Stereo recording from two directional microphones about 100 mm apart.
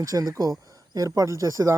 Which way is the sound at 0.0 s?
35° right (ahead or behind).